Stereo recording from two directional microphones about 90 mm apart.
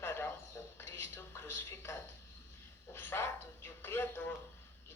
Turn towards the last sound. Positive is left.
turn(degrees=20)  # may be behind; listen again after turning